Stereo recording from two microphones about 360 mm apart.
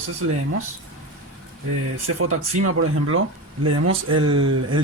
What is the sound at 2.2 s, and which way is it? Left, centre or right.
Speech, right.